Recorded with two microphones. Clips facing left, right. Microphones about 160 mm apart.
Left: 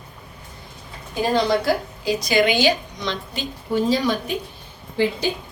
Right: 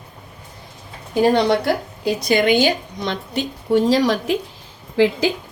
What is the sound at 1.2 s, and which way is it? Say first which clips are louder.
A woman's voice: right 4 dB; 65° right (ahead or behind).